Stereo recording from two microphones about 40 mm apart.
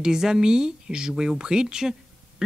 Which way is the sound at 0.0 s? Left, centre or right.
Centre.